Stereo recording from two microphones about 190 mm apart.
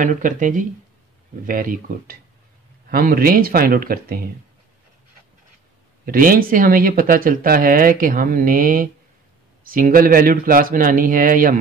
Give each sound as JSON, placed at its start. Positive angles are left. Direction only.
{"t": 0.0, "sound": "speech", "side_deg": -45}
{"t": 6.0, "sound": "speech", "side_deg": -50}